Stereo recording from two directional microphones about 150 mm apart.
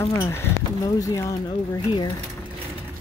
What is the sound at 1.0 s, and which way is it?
Speech, 25° left (ahead or behind).